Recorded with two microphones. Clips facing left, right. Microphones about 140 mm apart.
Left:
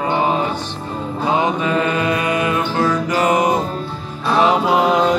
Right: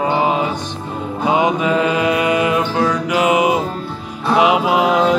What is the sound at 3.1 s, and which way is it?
Music, 5° right (ahead or behind).